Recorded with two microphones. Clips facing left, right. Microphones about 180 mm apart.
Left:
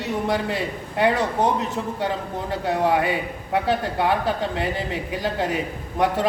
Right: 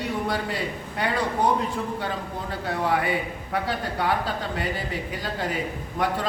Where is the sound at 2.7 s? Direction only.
20° left (ahead or behind).